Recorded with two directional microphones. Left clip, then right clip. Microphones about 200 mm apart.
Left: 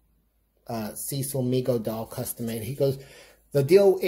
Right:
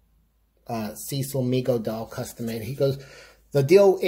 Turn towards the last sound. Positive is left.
turn(degrees=-5)  # may be behind; listen again after turning